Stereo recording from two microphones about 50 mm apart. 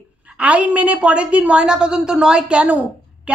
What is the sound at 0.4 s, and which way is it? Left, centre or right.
A woman's voice, right.